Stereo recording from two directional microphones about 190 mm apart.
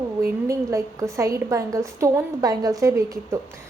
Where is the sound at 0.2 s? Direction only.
15° right (ahead or behind).